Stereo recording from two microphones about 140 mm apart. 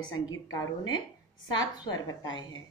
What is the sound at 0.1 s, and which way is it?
A woman's voice, 25° left (ahead or behind).